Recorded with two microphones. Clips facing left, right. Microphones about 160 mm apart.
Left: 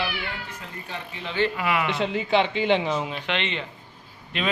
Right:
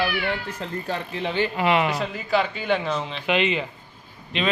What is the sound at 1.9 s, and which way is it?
Speech, 25° left (ahead or behind).